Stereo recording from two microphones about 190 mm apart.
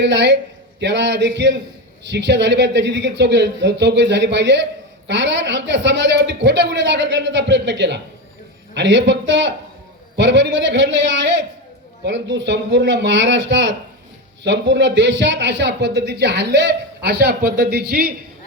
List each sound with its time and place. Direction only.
0.0 s a man's voice: 65° right (ahead or behind)